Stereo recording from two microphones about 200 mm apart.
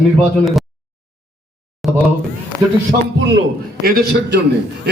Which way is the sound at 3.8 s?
50° right (ahead or behind).